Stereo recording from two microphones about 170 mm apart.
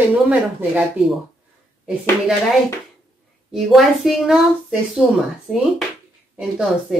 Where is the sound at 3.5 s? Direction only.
Centre (ahead or behind).